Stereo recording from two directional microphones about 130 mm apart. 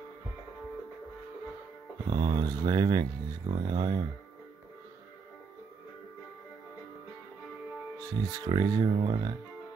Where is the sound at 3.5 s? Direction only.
35° right (ahead or behind).